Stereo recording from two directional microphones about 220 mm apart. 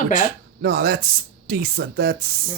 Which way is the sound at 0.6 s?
45° right (ahead or behind).